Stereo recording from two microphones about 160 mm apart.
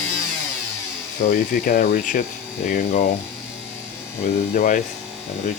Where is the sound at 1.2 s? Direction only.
65° left (ahead or behind).